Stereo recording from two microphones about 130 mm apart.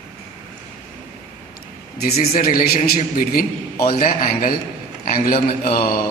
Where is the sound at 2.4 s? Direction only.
90° left.